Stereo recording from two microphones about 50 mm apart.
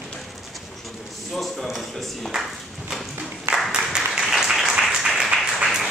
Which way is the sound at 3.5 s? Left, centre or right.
Right.